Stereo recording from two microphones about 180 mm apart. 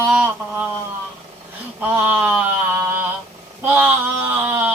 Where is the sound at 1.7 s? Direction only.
10° right (ahead or behind).